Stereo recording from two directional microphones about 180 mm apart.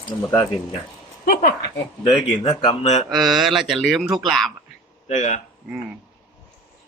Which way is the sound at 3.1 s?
Centre (ahead or behind).